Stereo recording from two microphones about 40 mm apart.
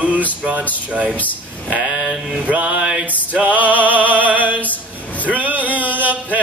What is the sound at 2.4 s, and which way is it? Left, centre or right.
Mantra, right.